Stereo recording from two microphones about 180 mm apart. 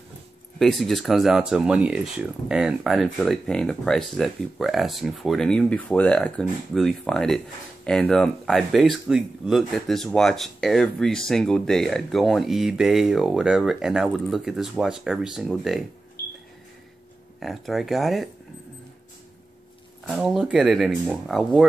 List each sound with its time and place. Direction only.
0.6 s speech: centre (ahead or behind)
16.2 s a sound: 60° left (ahead or behind)
17.4 s speech: centre (ahead or behind)
20.1 s speech: centre (ahead or behind)